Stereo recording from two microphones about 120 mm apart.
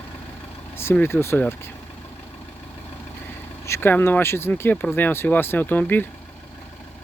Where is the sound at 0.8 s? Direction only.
20° left (ahead or behind).